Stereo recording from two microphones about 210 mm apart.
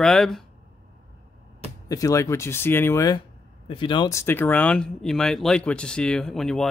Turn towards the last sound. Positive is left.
turn(degrees=0)  # may be behind; listen again after turning